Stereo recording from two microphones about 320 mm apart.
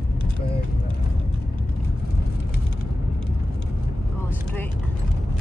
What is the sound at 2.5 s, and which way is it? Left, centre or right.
Vehicle, left.